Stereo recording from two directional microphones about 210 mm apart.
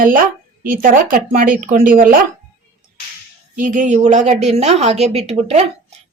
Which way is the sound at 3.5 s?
40° right (ahead or behind).